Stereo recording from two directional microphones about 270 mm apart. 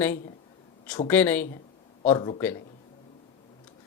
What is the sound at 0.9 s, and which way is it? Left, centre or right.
Speech, centre.